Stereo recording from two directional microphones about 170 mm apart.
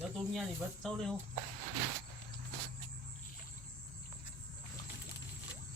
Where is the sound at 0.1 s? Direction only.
Centre (ahead or behind).